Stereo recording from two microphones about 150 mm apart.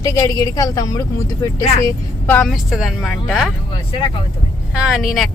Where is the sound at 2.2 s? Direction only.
10° left (ahead or behind).